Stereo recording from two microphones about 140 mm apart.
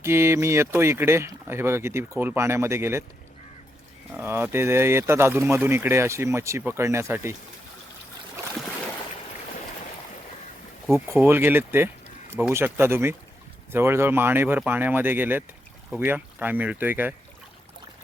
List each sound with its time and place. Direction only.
0.0 s speech: 20° right (ahead or behind)
4.1 s speech: 15° right (ahead or behind)
10.9 s speech: 15° right (ahead or behind)